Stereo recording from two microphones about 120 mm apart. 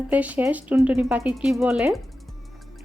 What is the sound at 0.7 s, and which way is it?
A woman's voice, centre (ahead or behind).